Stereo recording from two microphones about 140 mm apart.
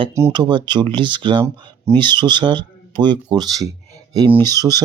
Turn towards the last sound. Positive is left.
turn(degrees=-25)  # may be behind; listen again after turning